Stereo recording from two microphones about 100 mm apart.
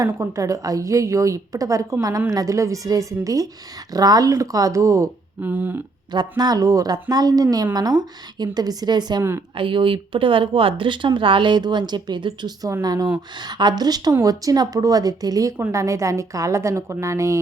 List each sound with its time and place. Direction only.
0.0 s a woman's voice: 35° right (ahead or behind)
5.4 s a sound: 15° right (ahead or behind)
6.1 s a woman's voice: 45° right (ahead or behind)
9.6 s speech: 60° right (ahead or behind)
12.6 s a woman's voice: 40° right (ahead or behind)